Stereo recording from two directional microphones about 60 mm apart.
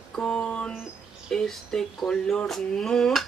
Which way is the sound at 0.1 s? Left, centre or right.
Centre.